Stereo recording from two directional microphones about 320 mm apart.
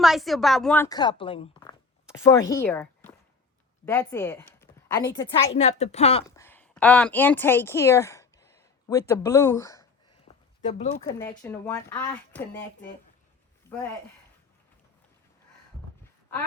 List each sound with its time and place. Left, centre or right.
0.0 s a woman's voice: centre
6.3 s a sound: centre; by 11.0 s left
11.0 s speech: centre